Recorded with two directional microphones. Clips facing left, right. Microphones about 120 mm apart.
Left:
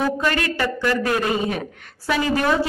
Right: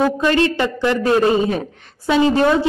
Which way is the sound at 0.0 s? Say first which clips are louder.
Right 6 dB; 25° right (ahead or behind).